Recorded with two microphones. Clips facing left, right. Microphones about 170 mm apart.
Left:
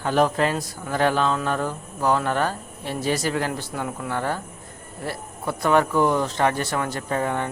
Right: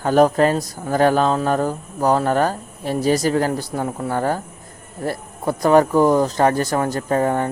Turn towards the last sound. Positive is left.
turn(degrees=-40)  # may be behind; listen again after turning